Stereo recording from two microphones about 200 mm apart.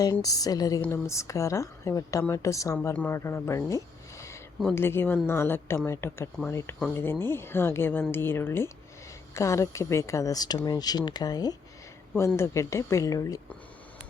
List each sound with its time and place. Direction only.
0.0 s a woman's voice: 20° left (ahead or behind)
3.7 s a sound: 15° left (ahead or behind)
4.6 s a woman's voice: 10° left (ahead or behind)